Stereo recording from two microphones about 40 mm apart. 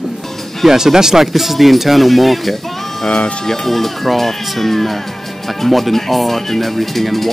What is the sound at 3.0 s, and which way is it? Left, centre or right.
Speech, left.